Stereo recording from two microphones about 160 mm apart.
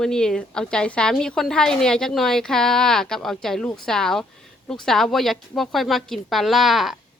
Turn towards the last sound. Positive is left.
turn(degrees=0)  # may be behind; listen again after turning